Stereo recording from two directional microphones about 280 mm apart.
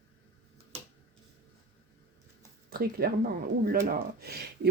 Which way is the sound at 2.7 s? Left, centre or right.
Right.